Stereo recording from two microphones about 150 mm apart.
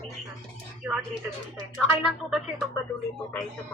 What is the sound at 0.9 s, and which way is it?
Speech, 10° right (ahead or behind).